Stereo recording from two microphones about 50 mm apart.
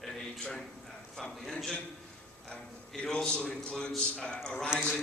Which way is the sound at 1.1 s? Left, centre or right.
Centre.